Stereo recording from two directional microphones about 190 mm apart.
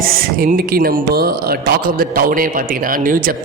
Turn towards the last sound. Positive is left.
turn(degrees=-45)  # may be behind; listen again after turning